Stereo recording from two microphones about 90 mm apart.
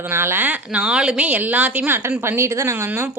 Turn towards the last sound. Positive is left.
turn(degrees=-30)  # may be behind; listen again after turning